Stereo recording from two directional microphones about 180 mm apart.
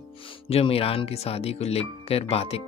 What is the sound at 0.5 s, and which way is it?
Speech, 35° left (ahead or behind).